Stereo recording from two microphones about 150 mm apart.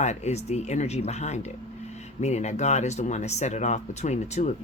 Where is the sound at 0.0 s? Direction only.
50° left (ahead or behind).